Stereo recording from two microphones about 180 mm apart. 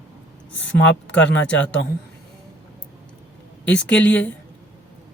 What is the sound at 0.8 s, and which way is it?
Speech, 85° left.